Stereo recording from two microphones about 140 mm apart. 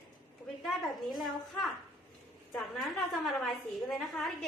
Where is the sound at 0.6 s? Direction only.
Centre (ahead or behind).